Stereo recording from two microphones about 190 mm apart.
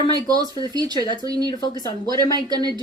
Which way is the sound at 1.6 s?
20° left (ahead or behind).